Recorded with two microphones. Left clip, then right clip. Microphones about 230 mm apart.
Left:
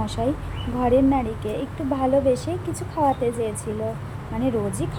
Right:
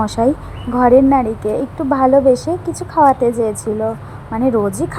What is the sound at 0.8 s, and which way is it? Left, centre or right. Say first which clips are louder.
Speech: right 9 dB; centre.